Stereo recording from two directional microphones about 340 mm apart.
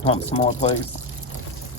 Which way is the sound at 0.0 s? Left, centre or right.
Centre.